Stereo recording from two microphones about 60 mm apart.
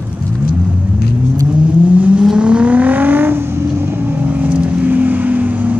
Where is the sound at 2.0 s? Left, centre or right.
Right.